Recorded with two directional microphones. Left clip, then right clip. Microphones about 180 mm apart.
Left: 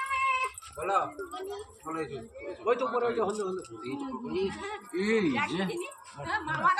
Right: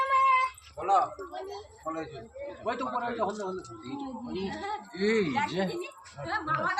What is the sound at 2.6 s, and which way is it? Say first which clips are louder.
Speech: left 4 dB; 10° right (ahead or behind).